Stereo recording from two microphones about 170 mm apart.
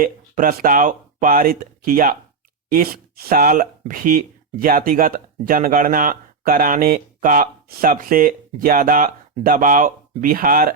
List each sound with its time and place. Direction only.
0.0 s speech: 55° right (ahead or behind)